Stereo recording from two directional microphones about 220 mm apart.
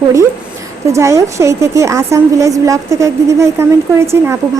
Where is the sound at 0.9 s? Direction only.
15° right (ahead or behind).